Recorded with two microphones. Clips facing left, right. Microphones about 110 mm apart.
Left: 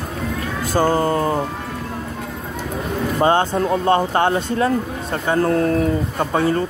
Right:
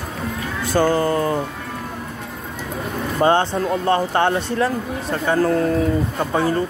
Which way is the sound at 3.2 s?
15° left (ahead or behind).